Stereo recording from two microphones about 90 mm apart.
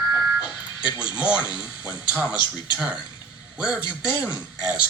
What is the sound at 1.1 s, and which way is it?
Speech, 60° left (ahead or behind).